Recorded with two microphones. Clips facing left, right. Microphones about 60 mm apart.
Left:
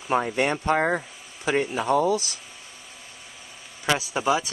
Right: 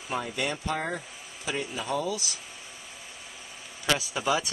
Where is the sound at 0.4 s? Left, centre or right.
Left.